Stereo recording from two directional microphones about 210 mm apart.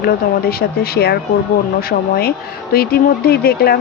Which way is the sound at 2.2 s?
45° left (ahead or behind).